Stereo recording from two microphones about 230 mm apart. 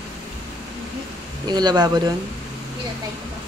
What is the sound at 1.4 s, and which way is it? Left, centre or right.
Speech, centre.